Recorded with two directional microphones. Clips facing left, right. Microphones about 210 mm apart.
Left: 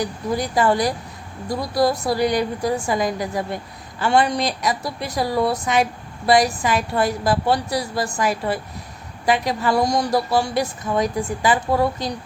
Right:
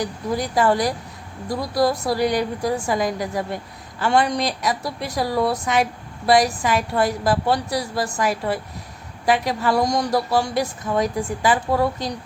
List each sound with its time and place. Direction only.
0.0 s a woman's voice: centre (ahead or behind)